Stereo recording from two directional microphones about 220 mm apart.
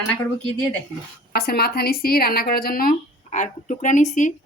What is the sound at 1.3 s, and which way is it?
A woman's voice, 45° left (ahead or behind).